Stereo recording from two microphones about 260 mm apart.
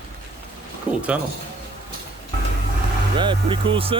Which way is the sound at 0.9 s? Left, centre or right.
Centre.